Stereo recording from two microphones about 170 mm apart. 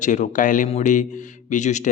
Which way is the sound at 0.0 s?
45° left (ahead or behind).